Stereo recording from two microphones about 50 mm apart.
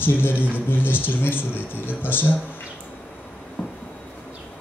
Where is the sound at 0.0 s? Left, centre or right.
Left.